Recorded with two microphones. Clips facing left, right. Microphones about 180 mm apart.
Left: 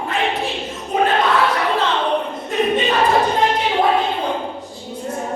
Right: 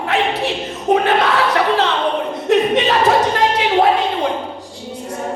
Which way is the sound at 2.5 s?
85° right.